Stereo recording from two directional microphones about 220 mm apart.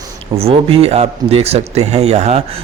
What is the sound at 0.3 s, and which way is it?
Speech, 25° right (ahead or behind).